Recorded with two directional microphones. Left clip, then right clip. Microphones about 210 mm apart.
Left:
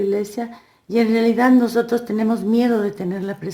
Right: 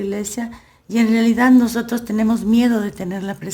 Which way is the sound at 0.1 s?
45° right (ahead or behind).